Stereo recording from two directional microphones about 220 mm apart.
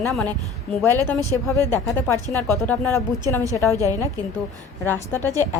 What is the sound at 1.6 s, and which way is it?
Speech, 15° left (ahead or behind).